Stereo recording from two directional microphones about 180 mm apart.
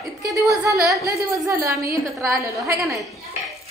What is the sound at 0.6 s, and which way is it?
Speech, 20° right (ahead or behind).